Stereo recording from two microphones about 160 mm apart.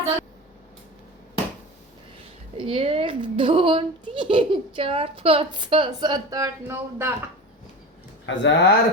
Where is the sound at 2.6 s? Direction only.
35° right (ahead or behind); by 7.1 s 20° right (ahead or behind).